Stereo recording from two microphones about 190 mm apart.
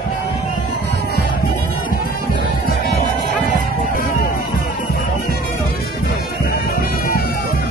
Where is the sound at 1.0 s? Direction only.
50° left (ahead or behind).